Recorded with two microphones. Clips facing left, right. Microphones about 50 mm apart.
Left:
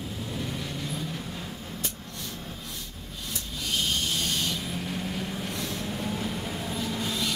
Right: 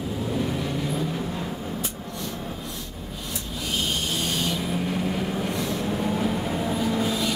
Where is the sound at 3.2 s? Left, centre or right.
Centre.